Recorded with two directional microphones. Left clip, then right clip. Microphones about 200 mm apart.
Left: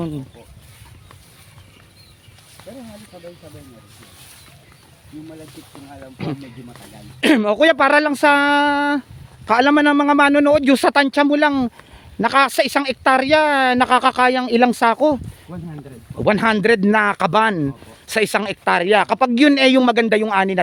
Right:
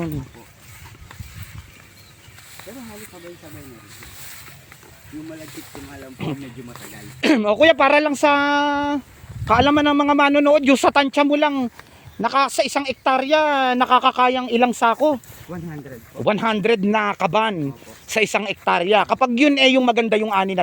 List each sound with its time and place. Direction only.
6.2 s speech: 15° left (ahead or behind)